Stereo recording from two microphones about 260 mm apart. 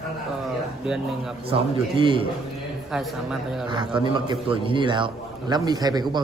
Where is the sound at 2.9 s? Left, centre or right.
Centre.